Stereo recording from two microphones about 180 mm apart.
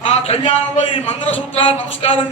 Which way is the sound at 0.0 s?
35° left (ahead or behind).